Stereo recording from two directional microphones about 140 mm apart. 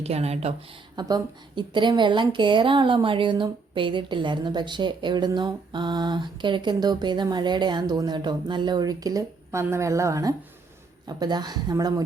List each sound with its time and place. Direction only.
0.0 s speech: 45° right (ahead or behind)
0.9 s a woman's voice: 30° right (ahead or behind)